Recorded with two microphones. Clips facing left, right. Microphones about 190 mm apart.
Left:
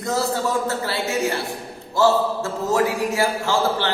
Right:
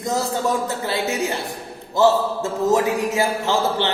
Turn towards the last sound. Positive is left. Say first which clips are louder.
# right 1 dB
turn(degrees=-20)  # may be behind; listen again after turning